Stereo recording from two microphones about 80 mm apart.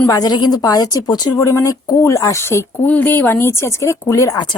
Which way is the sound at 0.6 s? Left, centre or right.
Left.